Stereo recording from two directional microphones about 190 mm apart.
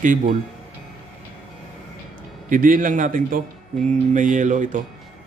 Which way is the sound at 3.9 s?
40° right (ahead or behind).